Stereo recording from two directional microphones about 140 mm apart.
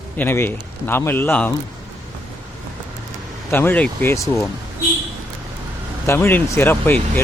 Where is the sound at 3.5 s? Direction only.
15° left (ahead or behind).